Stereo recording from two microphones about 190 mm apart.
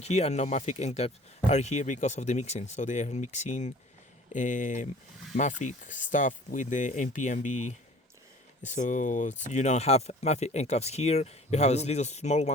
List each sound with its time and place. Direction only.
0.0 s speech: 35° left (ahead or behind)